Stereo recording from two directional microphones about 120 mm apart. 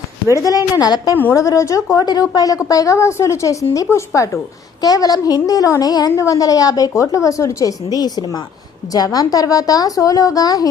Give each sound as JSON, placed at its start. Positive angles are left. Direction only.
{"t": 0.3, "sound": "a woman's voice", "side_deg": 30}